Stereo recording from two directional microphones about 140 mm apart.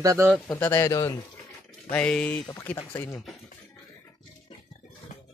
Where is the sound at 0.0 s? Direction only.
20° right (ahead or behind).